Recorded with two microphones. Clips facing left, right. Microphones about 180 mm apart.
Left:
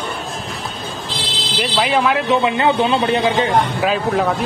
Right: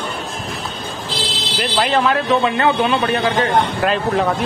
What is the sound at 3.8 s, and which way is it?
Speech, centre (ahead or behind).